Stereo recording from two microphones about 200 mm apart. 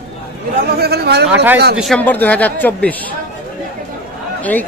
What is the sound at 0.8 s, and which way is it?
Speech, 55° right (ahead or behind).